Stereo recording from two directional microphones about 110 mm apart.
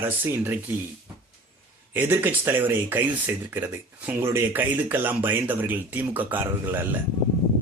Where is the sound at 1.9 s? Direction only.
20° right (ahead or behind).